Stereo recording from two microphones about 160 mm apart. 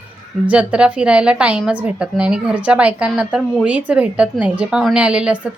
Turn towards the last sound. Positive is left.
turn(degrees=-5)  # may be behind; listen again after turning